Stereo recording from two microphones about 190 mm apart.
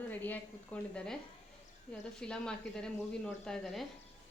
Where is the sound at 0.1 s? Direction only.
10° left (ahead or behind).